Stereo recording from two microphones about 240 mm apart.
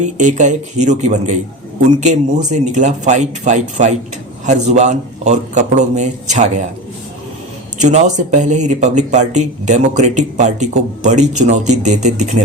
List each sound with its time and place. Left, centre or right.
0.0 s speech: right
7.8 s speech: right